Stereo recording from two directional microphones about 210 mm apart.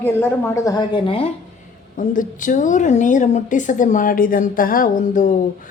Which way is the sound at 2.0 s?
40° left (ahead or behind).